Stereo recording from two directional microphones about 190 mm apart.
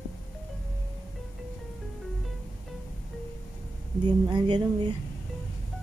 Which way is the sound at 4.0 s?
25° right (ahead or behind).